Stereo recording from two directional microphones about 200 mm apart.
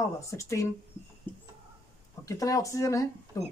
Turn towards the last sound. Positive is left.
turn(degrees=15)  # may be behind; listen again after turning